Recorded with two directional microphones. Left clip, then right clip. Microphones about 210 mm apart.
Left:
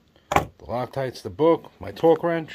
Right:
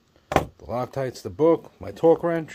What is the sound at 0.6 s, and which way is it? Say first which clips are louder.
Speech: even; 15° right (ahead or behind).